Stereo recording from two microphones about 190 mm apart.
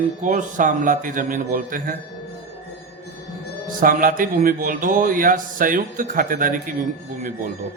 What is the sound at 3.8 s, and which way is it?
Speech, 45° right (ahead or behind).